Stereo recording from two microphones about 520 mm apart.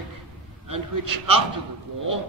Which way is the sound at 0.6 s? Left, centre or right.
Right.